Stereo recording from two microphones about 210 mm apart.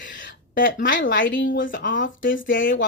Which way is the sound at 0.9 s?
65° left (ahead or behind).